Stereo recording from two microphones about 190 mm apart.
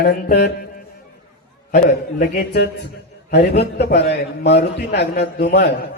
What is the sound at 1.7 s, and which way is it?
A man's voice, 55° left (ahead or behind).